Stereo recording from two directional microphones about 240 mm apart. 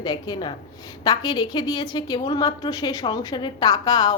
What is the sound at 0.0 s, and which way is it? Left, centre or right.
A woman's voice, centre.